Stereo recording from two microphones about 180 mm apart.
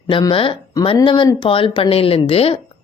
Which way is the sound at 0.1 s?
25° left (ahead or behind).